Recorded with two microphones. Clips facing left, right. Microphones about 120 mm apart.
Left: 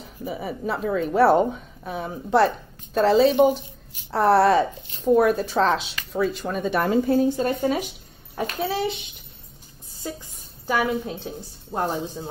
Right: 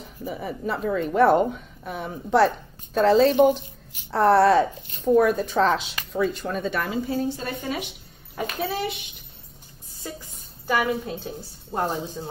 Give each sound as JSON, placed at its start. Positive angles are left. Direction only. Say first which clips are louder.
{"t": 0.0, "sound": "a woman's voice", "louder": "left 1 dB", "side_deg": 5}
{"t": 6.9, "sound": "speech", "louder": "left 6 dB", "side_deg": 50}
{"t": 8.7, "sound": "a child's voice", "louder": "left 3 dB", "side_deg": 30}
{"t": 10.7, "sound": "a woman's voice", "louder": "even", "side_deg": 5}